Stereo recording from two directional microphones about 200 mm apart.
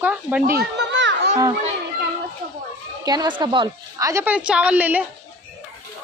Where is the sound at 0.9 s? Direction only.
65° right (ahead or behind).